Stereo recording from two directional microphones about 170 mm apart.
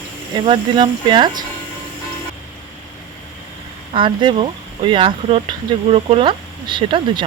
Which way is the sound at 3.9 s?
30° right (ahead or behind).